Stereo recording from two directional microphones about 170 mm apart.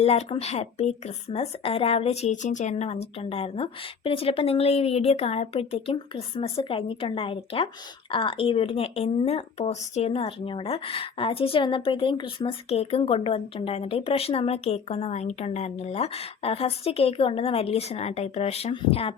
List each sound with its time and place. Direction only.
0.0 s speech: 35° left (ahead or behind)